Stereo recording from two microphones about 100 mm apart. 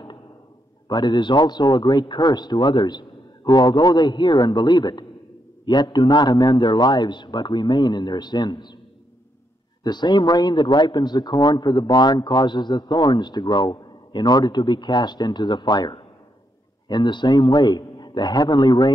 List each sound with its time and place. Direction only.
0.8 s a man's voice: 45° left (ahead or behind)
9.8 s a man's voice: 45° left (ahead or behind)